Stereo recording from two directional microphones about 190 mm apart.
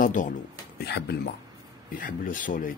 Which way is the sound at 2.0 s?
45° left (ahead or behind).